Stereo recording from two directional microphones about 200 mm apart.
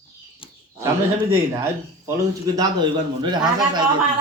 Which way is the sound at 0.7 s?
15° right (ahead or behind).